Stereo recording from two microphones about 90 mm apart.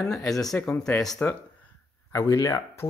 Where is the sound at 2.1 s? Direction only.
40° left (ahead or behind).